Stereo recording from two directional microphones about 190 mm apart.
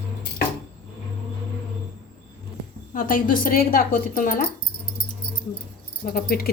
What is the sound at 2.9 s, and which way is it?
Speech, 45° left (ahead or behind).